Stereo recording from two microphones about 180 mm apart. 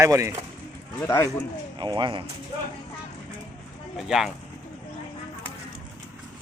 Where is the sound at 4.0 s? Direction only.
Centre (ahead or behind).